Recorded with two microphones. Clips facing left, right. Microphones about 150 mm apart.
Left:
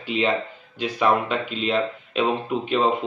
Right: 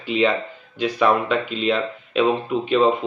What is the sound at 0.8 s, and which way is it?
Speech, centre (ahead or behind).